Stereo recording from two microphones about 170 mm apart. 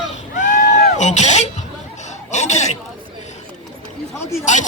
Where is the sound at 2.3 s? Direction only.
40° left (ahead or behind).